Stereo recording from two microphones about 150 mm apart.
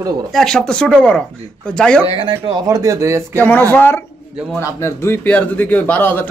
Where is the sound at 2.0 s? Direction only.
35° right (ahead or behind).